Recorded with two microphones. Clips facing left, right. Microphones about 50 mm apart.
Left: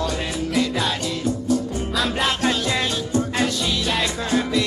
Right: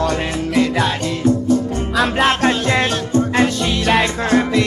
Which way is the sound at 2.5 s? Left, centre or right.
Right.